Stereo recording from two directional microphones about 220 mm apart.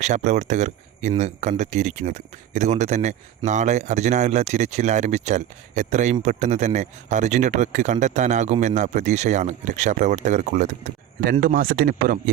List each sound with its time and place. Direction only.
0.0 s speech: 30° right (ahead or behind)